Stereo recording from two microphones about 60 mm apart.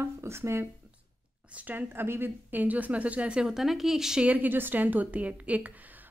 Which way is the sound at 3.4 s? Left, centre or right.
Centre.